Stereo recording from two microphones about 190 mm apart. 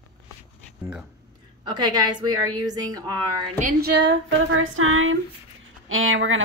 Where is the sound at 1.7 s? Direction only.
20° right (ahead or behind).